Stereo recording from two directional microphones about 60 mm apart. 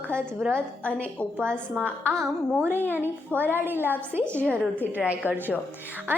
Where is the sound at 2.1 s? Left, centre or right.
Centre.